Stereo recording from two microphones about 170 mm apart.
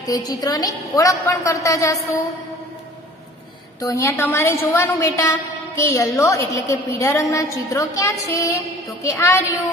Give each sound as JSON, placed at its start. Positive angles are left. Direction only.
{"t": 0.0, "sound": "a woman's voice", "side_deg": 20}
{"t": 3.9, "sound": "a woman's voice", "side_deg": 15}